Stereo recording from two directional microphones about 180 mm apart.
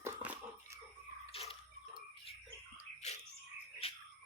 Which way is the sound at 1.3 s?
35° left (ahead or behind).